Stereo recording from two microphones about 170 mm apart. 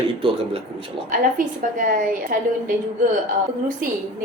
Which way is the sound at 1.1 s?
50° right (ahead or behind).